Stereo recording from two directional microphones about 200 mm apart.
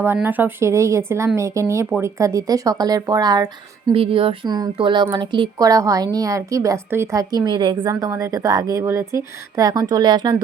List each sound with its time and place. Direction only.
0.0 s a woman's voice: 10° right (ahead or behind)